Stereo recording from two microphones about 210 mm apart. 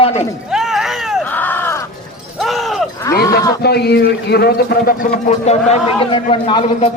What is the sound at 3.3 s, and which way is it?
Speech, 15° left (ahead or behind).